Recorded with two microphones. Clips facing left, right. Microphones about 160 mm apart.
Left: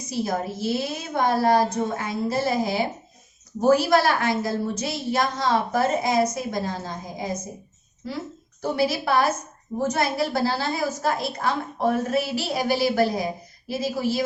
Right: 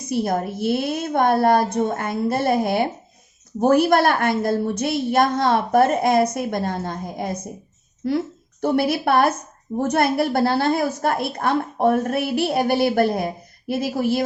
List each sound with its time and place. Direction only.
0.1 s a woman's voice: 60° right (ahead or behind)
8.6 s a woman's voice: 60° right (ahead or behind)